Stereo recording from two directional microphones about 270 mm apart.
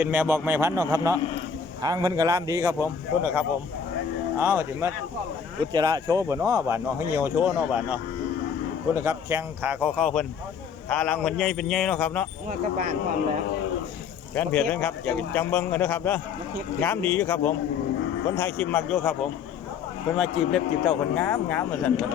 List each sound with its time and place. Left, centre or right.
0.0 s a man's voice: centre
12.5 s speech: right
14.3 s a man's voice: centre